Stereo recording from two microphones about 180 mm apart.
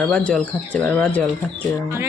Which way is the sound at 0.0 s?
5° left (ahead or behind).